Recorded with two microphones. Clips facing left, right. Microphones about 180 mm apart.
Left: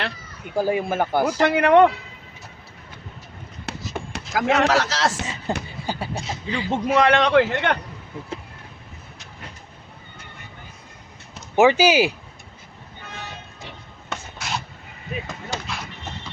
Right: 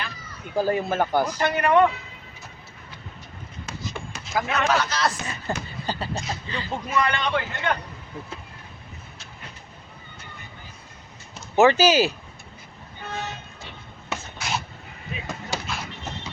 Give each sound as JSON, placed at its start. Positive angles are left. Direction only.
{"t": 0.5, "sound": "speech", "side_deg": 10}
{"t": 1.4, "sound": "a man's voice", "side_deg": 80}
{"t": 3.7, "sound": "a sound", "side_deg": 70}
{"t": 4.4, "sound": "a man's voice", "side_deg": 90}
{"t": 5.2, "sound": "speech", "side_deg": 25}
{"t": 5.8, "sound": "speech", "side_deg": 10}
{"t": 6.8, "sound": "a man's voice", "side_deg": 85}
{"t": 11.5, "sound": "speech", "side_deg": 10}
{"t": 14.1, "sound": "a sound", "side_deg": 0}